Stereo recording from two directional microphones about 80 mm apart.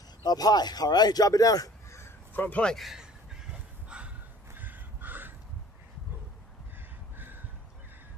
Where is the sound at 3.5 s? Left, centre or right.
Centre.